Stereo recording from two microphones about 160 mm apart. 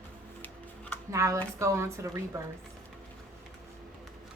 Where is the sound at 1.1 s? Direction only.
20° right (ahead or behind).